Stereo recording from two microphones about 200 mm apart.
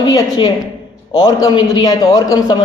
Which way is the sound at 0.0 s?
25° left (ahead or behind).